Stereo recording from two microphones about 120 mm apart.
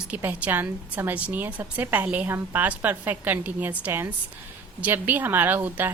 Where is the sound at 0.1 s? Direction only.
15° right (ahead or behind).